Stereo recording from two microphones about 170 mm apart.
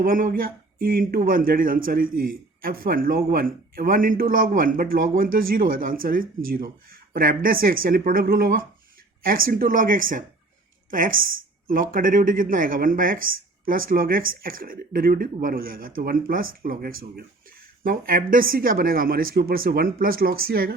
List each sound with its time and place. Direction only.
0.0 s a woman's voice: 55° right (ahead or behind)